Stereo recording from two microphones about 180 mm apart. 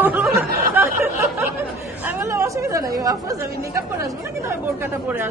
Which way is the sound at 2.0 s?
15° right (ahead or behind).